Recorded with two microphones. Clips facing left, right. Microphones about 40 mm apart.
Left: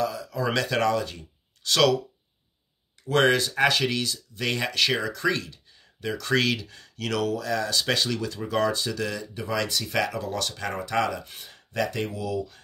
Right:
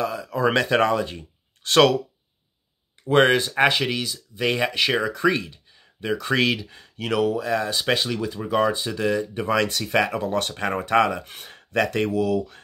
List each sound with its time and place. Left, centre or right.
0.0 s speech: right
3.0 s speech: right
3.9 s speech: centre; by 12.5 s right